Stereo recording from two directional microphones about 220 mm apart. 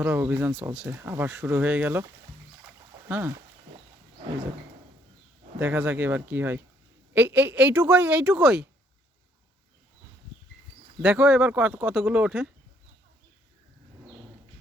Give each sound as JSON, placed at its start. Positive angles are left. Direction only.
{"t": 0.0, "sound": "speech", "side_deg": -10}
{"t": 3.1, "sound": "speech", "side_deg": -10}
{"t": 5.5, "sound": "speech", "side_deg": -10}
{"t": 11.0, "sound": "speech", "side_deg": -5}